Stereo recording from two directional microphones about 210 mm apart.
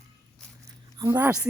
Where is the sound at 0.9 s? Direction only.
15° right (ahead or behind).